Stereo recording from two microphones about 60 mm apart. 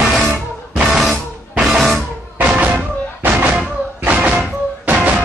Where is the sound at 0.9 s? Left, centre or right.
Centre.